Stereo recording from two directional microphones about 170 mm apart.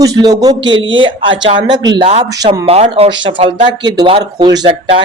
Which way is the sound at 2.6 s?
35° right (ahead or behind).